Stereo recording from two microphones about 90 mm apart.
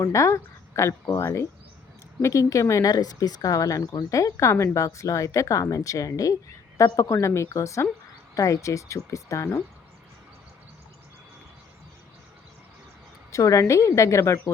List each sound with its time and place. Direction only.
0.0 s speech: 35° left (ahead or behind)
13.3 s speech: 35° left (ahead or behind)